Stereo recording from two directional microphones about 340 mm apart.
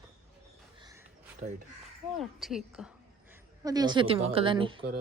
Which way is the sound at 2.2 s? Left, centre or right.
Centre.